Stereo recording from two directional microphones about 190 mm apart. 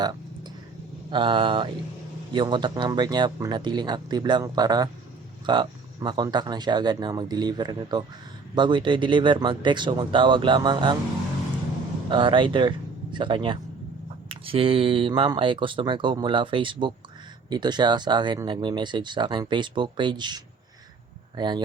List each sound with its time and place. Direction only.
0.0 s a sound: 20° right (ahead or behind)
1.1 s speech: 25° right (ahead or behind)
12.0 s speech: 25° right (ahead or behind)